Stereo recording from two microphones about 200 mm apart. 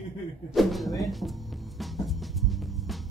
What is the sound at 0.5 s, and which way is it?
Music, centre (ahead or behind).